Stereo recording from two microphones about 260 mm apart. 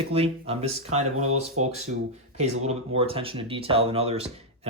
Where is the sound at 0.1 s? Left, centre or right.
Right.